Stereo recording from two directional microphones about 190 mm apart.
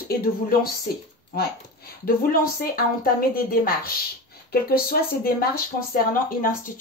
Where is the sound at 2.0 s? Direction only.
50° left (ahead or behind).